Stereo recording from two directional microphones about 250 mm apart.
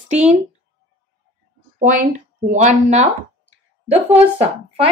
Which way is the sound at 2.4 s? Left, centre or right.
Right.